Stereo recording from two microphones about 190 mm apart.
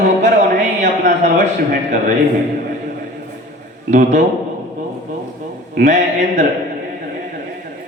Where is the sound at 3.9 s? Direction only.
40° right (ahead or behind).